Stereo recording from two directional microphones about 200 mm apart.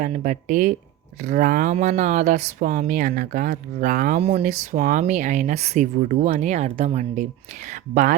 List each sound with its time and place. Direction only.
0.0 s speech: 40° right (ahead or behind)